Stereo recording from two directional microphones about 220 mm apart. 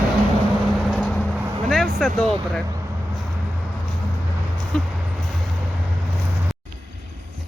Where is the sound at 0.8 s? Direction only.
5° right (ahead or behind).